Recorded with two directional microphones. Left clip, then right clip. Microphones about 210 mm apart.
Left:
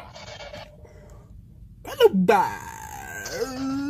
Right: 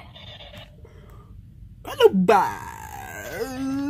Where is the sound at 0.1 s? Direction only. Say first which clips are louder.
Left 1 dB; 25° left (ahead or behind).